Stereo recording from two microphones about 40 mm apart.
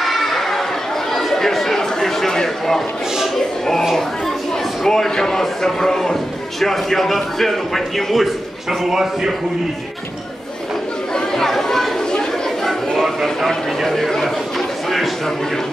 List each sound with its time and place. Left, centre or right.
0.0 s chatter: centre
2.0 s a sound: centre
3.3 s speech: centre
4.8 s a man's voice: centre
8.8 s a man's voice: centre
11.3 s chatter: centre
13.0 s speech: centre